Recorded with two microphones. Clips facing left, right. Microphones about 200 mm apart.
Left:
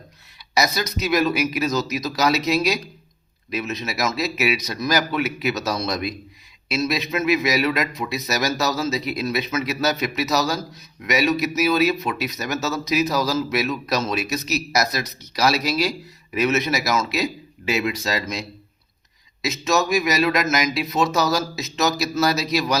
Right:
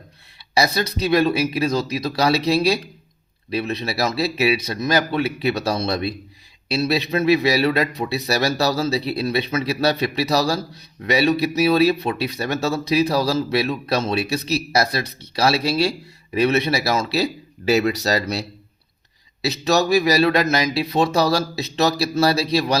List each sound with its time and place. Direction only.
0.5 s speech: 30° right (ahead or behind)